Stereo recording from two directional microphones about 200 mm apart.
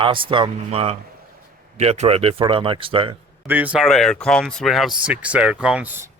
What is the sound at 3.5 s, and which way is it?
Speech, 5° right (ahead or behind).